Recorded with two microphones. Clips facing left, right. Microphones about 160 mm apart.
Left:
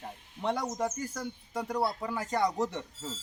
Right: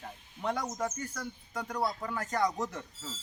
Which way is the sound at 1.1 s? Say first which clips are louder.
Left 3 dB; 25° left (ahead or behind).